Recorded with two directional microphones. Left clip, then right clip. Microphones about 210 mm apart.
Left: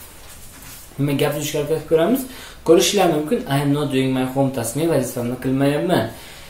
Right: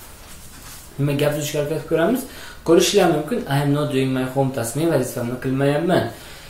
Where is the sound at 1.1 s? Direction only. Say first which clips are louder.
Even; 10° left (ahead or behind).